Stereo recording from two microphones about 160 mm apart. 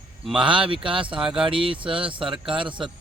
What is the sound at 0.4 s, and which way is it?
Speech, 30° right (ahead or behind).